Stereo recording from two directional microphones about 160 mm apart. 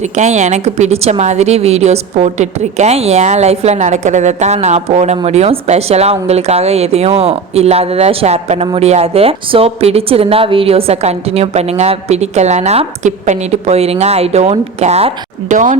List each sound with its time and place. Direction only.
0.0 s a woman's voice: 45° right (ahead or behind)